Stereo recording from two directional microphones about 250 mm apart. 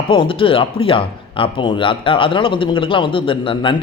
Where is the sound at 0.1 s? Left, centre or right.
Left.